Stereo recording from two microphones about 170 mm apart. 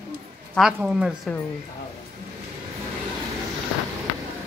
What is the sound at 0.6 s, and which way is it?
Speech, 5° right (ahead or behind).